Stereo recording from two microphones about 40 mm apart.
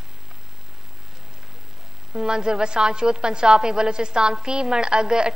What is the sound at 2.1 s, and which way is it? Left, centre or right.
A woman's voice, centre.